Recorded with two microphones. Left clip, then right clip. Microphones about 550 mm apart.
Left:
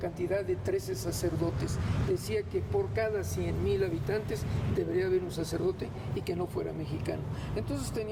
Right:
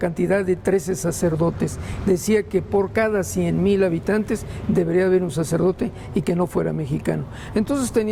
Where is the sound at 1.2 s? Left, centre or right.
Right.